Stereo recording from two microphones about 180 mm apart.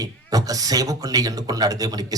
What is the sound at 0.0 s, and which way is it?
A man's voice, 20° right (ahead or behind).